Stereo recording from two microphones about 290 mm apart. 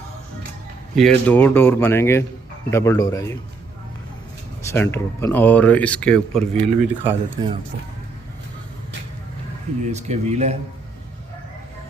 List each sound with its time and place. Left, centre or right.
0.9 s speech: centre
4.6 s speech: centre
9.9 s speech: right